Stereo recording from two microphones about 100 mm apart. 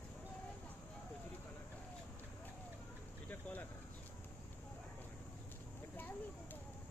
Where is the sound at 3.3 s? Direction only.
20° left (ahead or behind).